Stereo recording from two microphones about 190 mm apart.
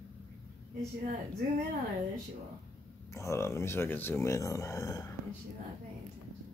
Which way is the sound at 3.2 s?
15° left (ahead or behind).